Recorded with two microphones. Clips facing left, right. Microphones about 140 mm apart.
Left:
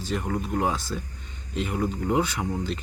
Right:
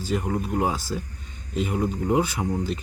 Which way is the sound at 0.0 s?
10° right (ahead or behind).